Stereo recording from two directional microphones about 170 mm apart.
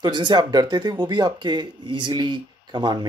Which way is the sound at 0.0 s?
25° right (ahead or behind).